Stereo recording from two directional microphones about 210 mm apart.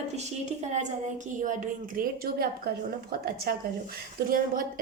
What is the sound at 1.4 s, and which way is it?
A woman's voice, 40° right (ahead or behind).